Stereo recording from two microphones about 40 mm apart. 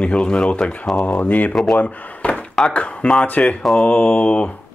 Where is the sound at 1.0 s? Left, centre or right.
Left.